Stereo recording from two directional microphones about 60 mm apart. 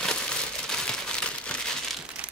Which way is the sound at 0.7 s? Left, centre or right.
Centre.